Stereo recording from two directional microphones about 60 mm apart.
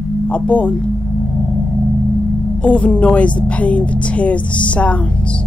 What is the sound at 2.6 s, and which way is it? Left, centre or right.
A woman's voice, left.